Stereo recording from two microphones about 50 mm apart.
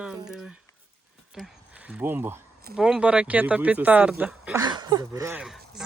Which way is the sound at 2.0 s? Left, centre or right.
Right.